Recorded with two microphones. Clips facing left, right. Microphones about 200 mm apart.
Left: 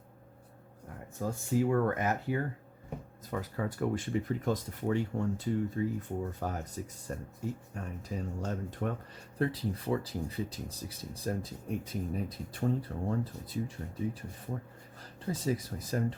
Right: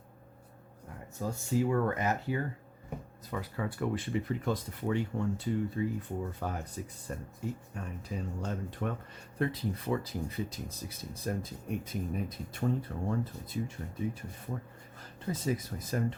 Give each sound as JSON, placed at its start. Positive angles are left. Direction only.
{"t": 1.2, "sound": "speech", "side_deg": 55}